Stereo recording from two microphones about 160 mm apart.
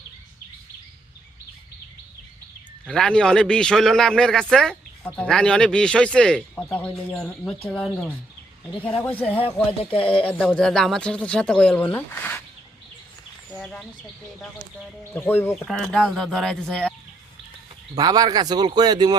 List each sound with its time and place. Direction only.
2.8 s a man's voice: 5° left (ahead or behind)
13.5 s a man's voice: 5° left (ahead or behind)
15.1 s a man's voice: 15° left (ahead or behind)
17.9 s speech: 25° right (ahead or behind)